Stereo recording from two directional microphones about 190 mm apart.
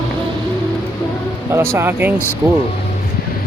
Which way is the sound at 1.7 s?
10° right (ahead or behind).